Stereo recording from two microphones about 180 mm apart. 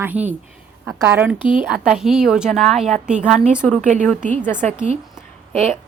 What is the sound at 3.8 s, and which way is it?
Speech, 45° right (ahead or behind).